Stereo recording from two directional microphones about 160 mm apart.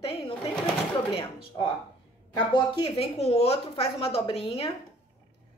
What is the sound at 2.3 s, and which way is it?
A woman's voice, 30° left (ahead or behind).